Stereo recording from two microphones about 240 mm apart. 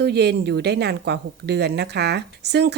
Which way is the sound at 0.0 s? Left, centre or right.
Right.